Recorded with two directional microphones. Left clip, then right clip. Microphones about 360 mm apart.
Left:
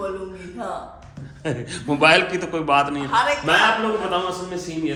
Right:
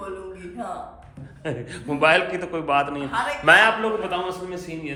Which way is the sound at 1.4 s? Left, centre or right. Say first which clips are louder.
Left 4 dB; centre.